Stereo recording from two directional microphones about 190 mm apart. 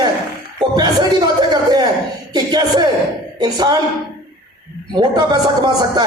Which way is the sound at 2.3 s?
20° right (ahead or behind).